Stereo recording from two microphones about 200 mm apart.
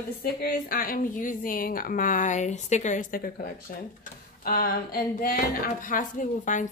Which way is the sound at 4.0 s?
45° left (ahead or behind).